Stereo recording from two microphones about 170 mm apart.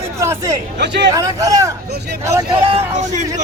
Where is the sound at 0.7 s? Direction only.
90° right.